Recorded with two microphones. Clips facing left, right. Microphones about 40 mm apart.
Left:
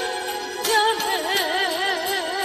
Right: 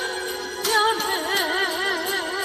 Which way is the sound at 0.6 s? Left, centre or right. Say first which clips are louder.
Left 1 dB; left.